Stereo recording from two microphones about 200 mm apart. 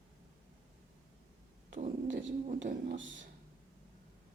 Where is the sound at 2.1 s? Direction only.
70° right (ahead or behind).